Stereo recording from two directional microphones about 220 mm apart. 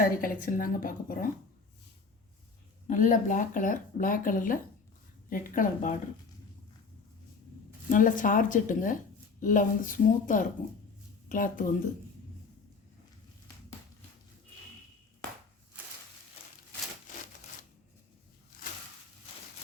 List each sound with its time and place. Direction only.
0.0 s speech: 40° left (ahead or behind)
2.8 s speech: 35° left (ahead or behind)
7.9 s speech: 40° left (ahead or behind)
15.8 s a sound: 5° right (ahead or behind)